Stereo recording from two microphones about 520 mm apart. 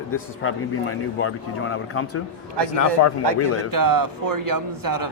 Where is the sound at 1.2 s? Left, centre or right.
Left.